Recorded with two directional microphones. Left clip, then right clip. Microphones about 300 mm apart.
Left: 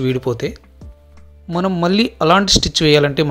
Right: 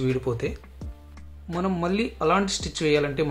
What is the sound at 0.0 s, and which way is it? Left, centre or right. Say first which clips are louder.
Speech: left 7 dB; left.